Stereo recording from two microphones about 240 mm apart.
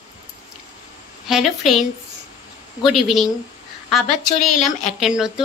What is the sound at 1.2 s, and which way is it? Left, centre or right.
A woman's voice, centre.